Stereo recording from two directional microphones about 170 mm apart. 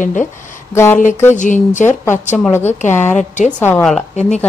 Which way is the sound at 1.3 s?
45° left (ahead or behind).